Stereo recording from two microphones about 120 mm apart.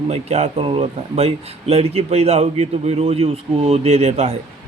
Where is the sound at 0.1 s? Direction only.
65° right (ahead or behind).